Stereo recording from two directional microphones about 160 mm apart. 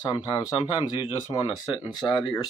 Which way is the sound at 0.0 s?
25° left (ahead or behind).